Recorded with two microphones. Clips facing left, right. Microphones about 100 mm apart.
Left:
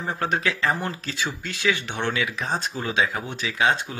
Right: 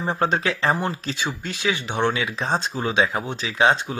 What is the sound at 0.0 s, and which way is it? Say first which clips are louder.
Speech: right 3 dB; 25° right (ahead or behind).